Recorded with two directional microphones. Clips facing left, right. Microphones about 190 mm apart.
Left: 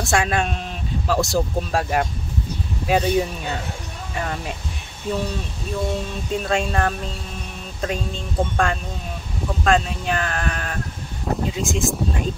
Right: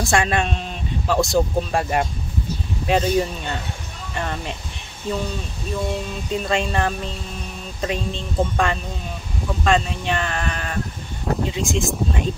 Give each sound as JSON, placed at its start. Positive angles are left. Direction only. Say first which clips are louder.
{"t": 0.0, "sound": "speech", "louder": "right 1 dB", "side_deg": 0}
{"t": 6.3, "sound": "speech", "louder": "even", "side_deg": 0}